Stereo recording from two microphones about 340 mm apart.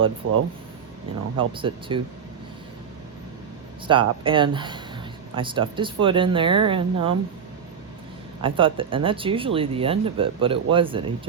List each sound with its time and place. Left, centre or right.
0.2 s speech: right
1.4 s speech: centre
3.8 s speech: centre
8.4 s speech: centre